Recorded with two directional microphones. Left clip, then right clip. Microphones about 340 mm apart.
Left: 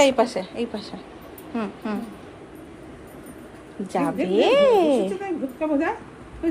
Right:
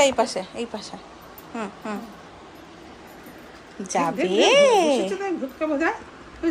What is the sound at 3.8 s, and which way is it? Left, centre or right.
A woman's voice, centre.